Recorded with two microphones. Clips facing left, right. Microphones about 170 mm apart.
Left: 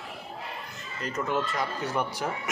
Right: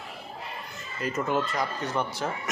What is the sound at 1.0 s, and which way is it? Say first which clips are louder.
Speech: right 2 dB; 5° right (ahead or behind).